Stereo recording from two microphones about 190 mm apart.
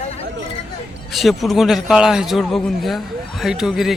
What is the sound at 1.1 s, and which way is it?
A man's voice, centre (ahead or behind).